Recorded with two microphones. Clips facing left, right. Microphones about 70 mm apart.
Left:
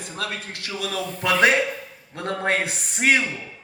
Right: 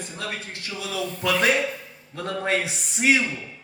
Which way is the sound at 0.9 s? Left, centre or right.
Left.